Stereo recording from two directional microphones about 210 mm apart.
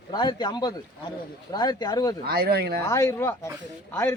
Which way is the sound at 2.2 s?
45° right (ahead or behind).